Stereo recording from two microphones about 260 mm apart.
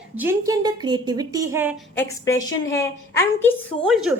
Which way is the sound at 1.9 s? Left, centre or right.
Centre.